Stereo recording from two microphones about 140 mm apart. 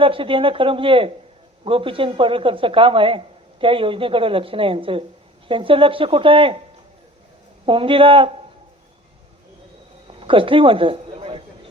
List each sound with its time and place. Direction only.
0.0 s a man's voice: 40° right (ahead or behind)
7.6 s a man's voice: 40° right (ahead or behind)
10.1 s a sound: 40° right (ahead or behind)